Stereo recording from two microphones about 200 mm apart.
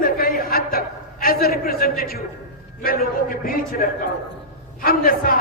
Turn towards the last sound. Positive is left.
turn(degrees=45)  # may be behind; listen again after turning